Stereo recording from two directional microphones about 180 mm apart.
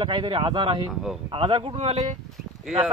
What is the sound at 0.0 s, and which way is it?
Speech, 25° right (ahead or behind).